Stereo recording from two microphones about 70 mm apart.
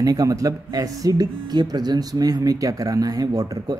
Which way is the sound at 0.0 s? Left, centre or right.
Right.